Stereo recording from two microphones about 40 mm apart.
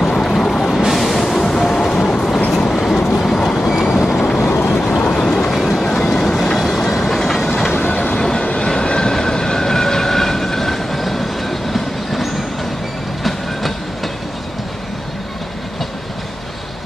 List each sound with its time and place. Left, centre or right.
0.0 s vehicle: centre
0.8 s music: centre
2.5 s train: centre
3.6 s vehicle: centre
4.2 s vehicle: centre
5.1 s train: centre
6.9 s train: centre
7.7 s music: left
8.4 s vehicle: left
8.6 s train: centre